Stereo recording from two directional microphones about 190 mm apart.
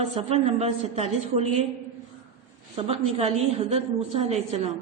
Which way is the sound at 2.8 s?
30° right (ahead or behind).